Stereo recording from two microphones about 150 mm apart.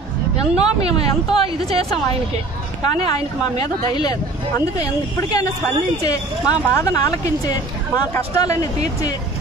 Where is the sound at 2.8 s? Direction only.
30° left (ahead or behind).